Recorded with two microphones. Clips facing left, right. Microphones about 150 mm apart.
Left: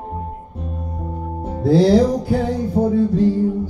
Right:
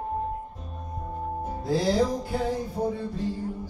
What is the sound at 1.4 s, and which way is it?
Music, 75° left (ahead or behind).